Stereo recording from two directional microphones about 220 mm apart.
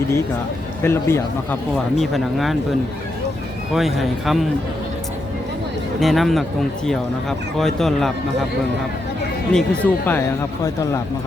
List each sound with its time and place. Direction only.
0.8 s speech: 10° left (ahead or behind)
6.0 s speech: centre (ahead or behind)
9.5 s speech: 5° left (ahead or behind)